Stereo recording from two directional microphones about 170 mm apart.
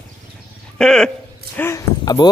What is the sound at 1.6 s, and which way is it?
Speech, 15° left (ahead or behind).